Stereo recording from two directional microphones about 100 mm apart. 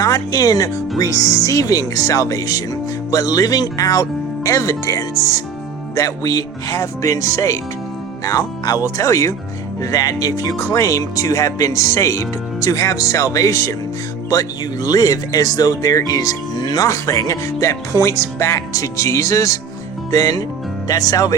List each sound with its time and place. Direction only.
0.0 s speech: 35° left (ahead or behind)